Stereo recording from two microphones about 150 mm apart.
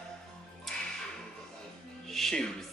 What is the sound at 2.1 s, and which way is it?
Speech, 5° left (ahead or behind).